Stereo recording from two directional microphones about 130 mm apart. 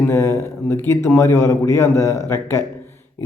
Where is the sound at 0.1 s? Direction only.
20° left (ahead or behind).